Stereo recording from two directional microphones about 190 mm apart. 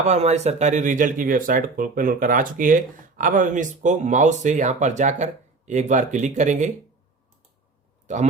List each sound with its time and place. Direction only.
0.0 s speech: 35° right (ahead or behind)
8.0 s speech: 40° right (ahead or behind)